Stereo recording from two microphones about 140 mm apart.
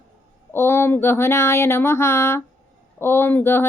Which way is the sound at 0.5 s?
15° left (ahead or behind).